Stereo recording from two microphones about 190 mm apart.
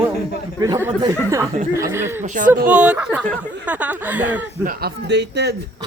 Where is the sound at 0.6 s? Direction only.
15° right (ahead or behind).